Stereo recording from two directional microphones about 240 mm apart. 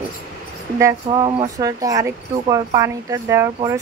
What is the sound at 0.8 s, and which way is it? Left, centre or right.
Speech, centre.